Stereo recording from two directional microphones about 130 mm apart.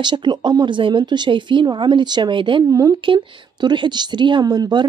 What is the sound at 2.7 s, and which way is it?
Speech, 25° right (ahead or behind).